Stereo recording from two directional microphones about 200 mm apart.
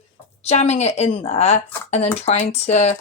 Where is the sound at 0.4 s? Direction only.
35° left (ahead or behind).